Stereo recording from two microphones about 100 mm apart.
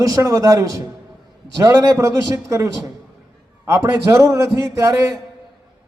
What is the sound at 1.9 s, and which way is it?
Speech, 30° right (ahead or behind).